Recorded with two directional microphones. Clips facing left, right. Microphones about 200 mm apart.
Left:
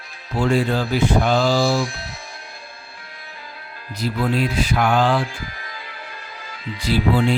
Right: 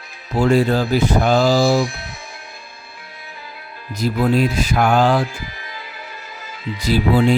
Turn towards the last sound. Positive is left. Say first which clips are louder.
# right 3 dB
turn(degrees=-40)  # may be behind; listen again after turning